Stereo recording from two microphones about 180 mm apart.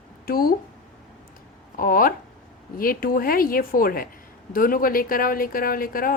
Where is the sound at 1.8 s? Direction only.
50° left (ahead or behind).